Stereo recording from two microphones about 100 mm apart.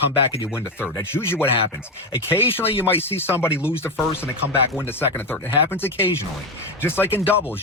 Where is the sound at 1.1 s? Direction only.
25° left (ahead or behind).